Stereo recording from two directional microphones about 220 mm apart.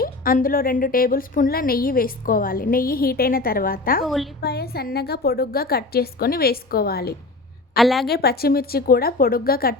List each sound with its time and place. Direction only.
0.0 s a woman's voice: 40° left (ahead or behind)
4.0 s a woman's voice: centre (ahead or behind)
4.4 s a woman's voice: 45° left (ahead or behind)
7.8 s a woman's voice: centre (ahead or behind)
8.0 s a woman's voice: 45° left (ahead or behind)